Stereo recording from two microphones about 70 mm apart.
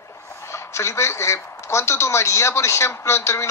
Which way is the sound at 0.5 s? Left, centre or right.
Left.